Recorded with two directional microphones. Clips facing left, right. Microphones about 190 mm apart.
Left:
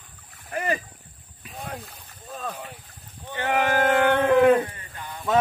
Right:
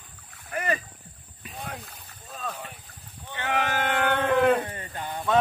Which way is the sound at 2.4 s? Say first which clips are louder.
Left 1 dB; 10° left (ahead or behind).